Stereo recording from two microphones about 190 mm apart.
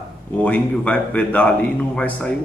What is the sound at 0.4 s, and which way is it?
A man's voice, 5° left (ahead or behind).